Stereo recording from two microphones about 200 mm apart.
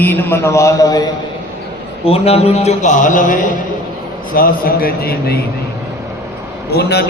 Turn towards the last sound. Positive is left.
turn(degrees=55)  # may be behind; listen again after turning